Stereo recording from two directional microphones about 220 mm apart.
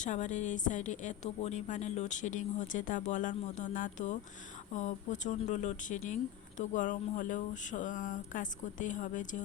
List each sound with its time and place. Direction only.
0.0 s a woman's voice: 35° left (ahead or behind)